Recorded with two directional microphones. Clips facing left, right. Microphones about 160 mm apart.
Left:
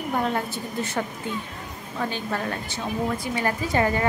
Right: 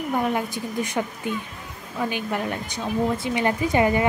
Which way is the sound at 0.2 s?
15° right (ahead or behind).